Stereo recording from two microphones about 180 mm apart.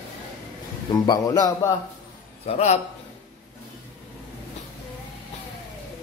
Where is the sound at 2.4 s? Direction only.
40° left (ahead or behind).